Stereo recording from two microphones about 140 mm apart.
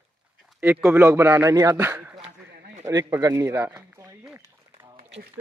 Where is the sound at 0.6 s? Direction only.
10° right (ahead or behind).